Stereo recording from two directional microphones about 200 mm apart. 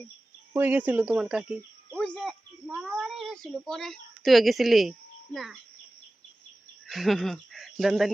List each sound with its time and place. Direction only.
0.5 s speech: 10° right (ahead or behind)
6.8 s speech: centre (ahead or behind)